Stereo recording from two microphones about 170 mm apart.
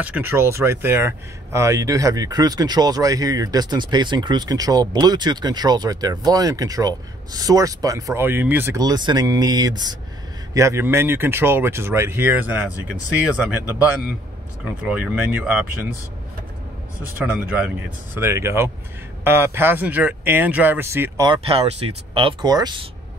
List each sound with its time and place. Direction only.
0.0 s speech: 10° right (ahead or behind)
14.9 s speech: 10° right (ahead or behind)
17.4 s speech: 10° right (ahead or behind)
21.3 s speech: 35° right (ahead or behind)